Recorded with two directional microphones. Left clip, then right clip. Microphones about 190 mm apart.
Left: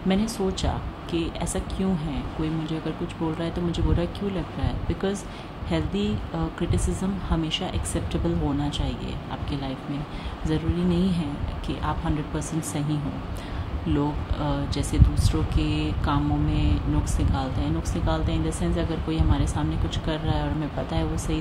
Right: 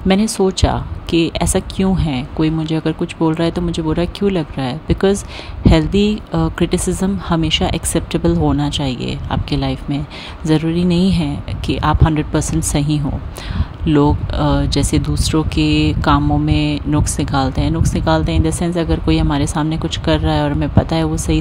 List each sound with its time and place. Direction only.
0.1 s speech: 45° right (ahead or behind)